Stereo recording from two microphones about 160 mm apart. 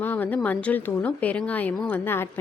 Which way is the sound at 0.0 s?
10° left (ahead or behind).